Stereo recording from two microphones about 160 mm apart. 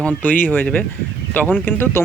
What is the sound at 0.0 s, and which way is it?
Speech, 10° left (ahead or behind).